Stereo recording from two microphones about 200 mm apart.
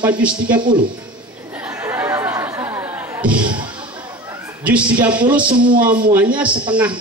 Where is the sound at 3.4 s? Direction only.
25° right (ahead or behind).